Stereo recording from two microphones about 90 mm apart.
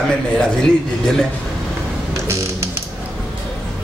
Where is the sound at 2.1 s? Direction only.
35° right (ahead or behind).